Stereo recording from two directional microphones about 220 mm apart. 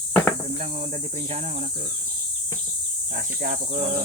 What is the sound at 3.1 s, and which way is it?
Cricket, 35° right (ahead or behind).